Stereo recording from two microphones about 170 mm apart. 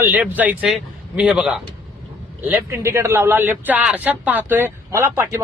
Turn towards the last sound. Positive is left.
turn(degrees=-15)  # may be behind; listen again after turning